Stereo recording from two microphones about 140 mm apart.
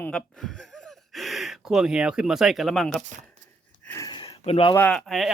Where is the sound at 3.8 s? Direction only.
20° left (ahead or behind).